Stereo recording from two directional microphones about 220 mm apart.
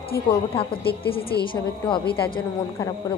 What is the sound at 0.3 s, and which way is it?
A woman's voice, 25° left (ahead or behind).